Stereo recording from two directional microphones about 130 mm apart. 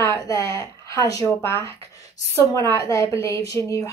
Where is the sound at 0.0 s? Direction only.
25° left (ahead or behind).